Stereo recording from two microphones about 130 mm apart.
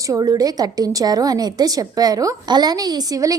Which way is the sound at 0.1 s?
30° right (ahead or behind).